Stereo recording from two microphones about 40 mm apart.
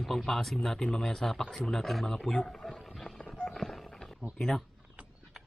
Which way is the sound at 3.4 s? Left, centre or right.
Centre.